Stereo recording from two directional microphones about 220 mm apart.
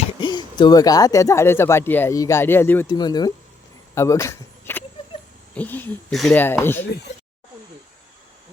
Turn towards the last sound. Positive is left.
turn(degrees=10)  # may be behind; listen again after turning